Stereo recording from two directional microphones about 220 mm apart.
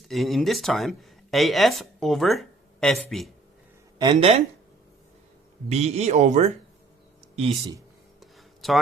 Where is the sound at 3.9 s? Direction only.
25° right (ahead or behind).